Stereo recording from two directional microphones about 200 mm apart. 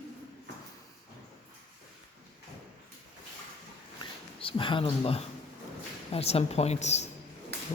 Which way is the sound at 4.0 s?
25° left (ahead or behind).